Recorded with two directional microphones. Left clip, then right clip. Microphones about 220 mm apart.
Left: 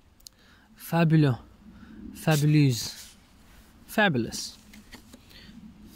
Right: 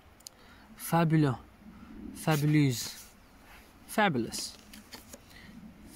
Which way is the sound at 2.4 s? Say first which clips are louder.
Left 3 dB; 30° left (ahead or behind).